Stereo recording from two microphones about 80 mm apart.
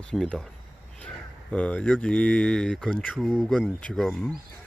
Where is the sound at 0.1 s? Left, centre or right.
Centre.